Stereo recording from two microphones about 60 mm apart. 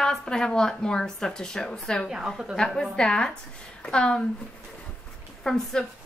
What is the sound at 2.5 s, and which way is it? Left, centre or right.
A woman's voice, centre.